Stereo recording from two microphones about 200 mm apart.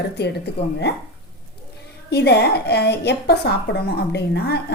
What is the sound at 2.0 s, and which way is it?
A woman's voice, 55° left (ahead or behind).